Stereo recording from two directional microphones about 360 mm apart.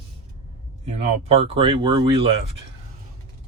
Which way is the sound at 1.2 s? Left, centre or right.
Centre.